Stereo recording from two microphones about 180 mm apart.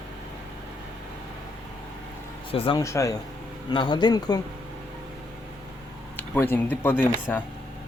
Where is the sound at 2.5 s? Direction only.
30° left (ahead or behind).